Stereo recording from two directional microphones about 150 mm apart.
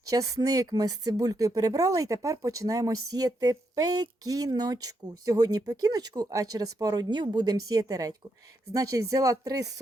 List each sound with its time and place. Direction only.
0.1 s speech: 25° right (ahead or behind)